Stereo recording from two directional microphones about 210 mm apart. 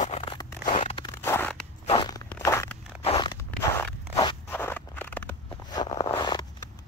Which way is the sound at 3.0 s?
20° left (ahead or behind).